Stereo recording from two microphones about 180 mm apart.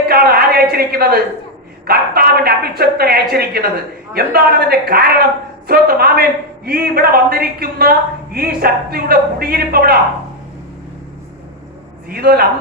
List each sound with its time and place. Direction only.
0.1 s a woman's voice: 55° right (ahead or behind)
12.0 s a woman's voice: 60° right (ahead or behind)